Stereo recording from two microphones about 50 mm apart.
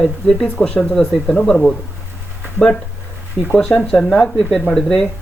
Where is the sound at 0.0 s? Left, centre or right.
Centre.